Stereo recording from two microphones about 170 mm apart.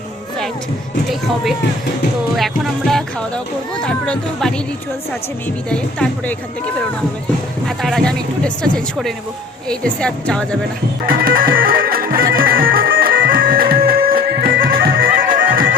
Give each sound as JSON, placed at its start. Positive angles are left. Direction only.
{"t": 2.3, "sound": "a child's voice", "side_deg": 0}
{"t": 5.6, "sound": "a child's voice", "side_deg": 5}
{"t": 7.8, "sound": "a child's voice", "side_deg": 0}
{"t": 11.0, "sound": "music", "side_deg": -55}